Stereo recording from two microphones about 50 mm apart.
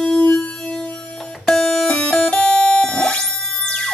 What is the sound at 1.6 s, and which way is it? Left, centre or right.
Music, centre.